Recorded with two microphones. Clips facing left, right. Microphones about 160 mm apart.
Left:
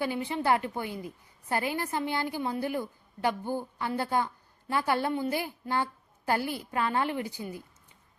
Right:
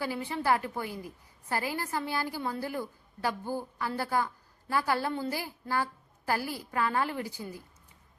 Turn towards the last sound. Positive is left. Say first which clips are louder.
# left 2 dB
turn(degrees=20)  # may be behind; listen again after turning